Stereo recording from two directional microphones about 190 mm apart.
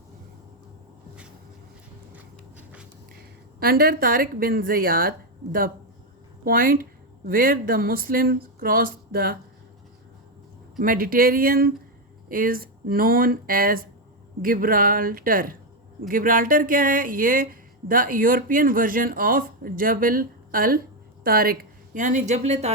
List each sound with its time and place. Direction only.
2.1 s a sound: 10° right (ahead or behind)
3.6 s speech: 50° right (ahead or behind)
10.8 s a woman's voice: 45° right (ahead or behind)